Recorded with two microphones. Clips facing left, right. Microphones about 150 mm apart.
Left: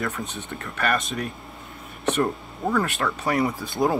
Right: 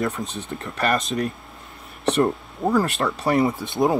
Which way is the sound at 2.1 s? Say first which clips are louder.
Right 6 dB; 25° right (ahead or behind).